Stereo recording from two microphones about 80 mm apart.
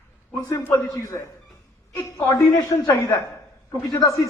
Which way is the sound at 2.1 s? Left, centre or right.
Left.